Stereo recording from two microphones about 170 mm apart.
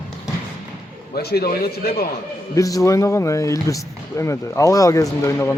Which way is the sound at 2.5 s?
20° left (ahead or behind).